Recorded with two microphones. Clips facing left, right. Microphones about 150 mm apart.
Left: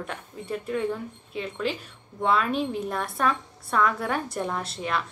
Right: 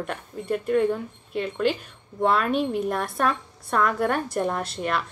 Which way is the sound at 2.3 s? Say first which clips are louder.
Right 2 dB; 55° right (ahead or behind).